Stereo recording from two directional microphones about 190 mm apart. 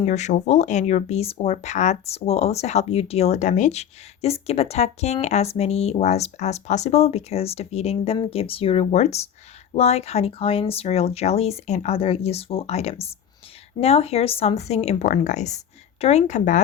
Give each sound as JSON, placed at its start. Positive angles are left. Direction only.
{"t": 0.0, "sound": "speech", "side_deg": 35}